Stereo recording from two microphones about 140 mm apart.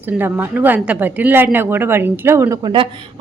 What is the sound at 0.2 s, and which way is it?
A woman's voice, 15° right (ahead or behind).